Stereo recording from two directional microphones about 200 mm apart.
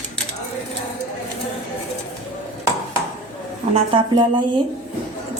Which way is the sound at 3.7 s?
25° right (ahead or behind).